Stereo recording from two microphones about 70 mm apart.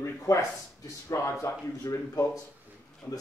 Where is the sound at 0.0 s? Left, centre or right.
Left.